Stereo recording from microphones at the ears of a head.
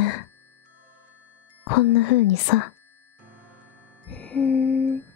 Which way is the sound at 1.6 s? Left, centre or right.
Left.